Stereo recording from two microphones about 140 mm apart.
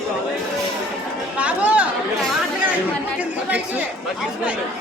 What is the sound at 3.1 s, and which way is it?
Chatter, 10° right (ahead or behind).